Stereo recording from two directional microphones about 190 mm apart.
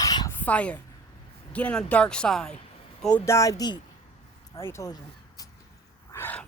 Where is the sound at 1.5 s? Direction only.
5° left (ahead or behind).